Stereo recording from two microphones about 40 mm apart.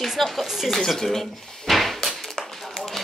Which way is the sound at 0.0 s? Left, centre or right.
Centre.